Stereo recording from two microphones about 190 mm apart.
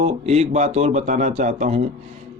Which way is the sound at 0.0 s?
35° right (ahead or behind).